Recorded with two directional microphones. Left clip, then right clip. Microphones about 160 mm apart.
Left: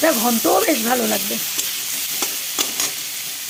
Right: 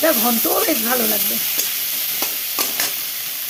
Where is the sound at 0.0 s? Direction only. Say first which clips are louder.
Left 1 dB; 15° left (ahead or behind).